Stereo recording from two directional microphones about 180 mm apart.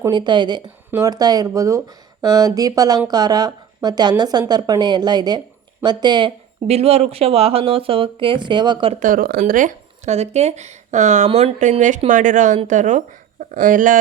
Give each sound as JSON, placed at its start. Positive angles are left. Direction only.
{"t": 0.0, "sound": "speech", "side_deg": -25}
{"t": 9.0, "sound": "speech", "side_deg": -50}